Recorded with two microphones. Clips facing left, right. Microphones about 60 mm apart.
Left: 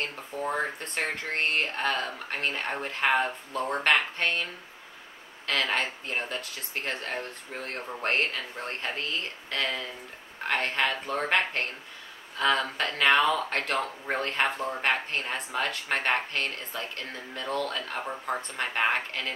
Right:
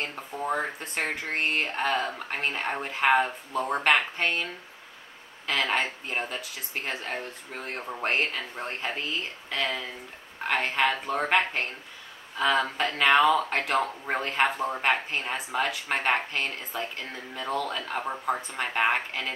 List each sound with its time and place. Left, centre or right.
0.0 s speech: centre
5.5 s speech: centre